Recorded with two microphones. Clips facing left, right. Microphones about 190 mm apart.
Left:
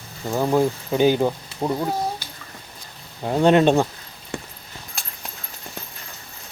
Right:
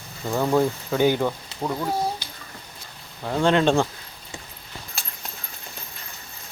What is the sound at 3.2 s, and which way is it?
Speech, 20° left (ahead or behind).